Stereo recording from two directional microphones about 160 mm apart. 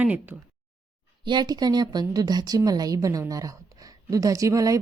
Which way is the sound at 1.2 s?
25° right (ahead or behind).